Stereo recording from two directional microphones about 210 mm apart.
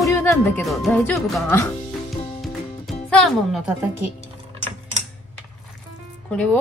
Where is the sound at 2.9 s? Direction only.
Centre (ahead or behind).